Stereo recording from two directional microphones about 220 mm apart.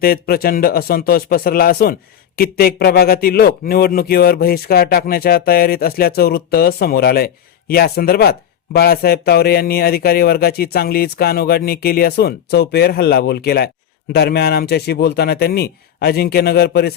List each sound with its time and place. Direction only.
0.0 s speech: 45° left (ahead or behind)